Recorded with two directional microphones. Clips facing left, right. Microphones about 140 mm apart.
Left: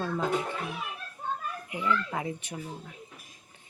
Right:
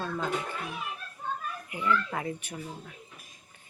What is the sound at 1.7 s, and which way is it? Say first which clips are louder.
Speech: right 1 dB; 20° left (ahead or behind).